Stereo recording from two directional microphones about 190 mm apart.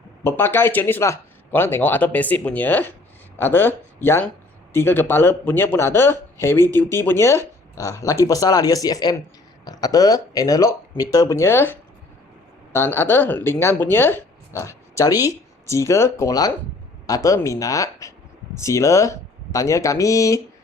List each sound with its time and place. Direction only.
0.3 s speech: 10° left (ahead or behind)